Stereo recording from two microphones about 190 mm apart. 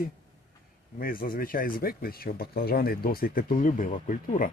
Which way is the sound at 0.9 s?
50° left (ahead or behind).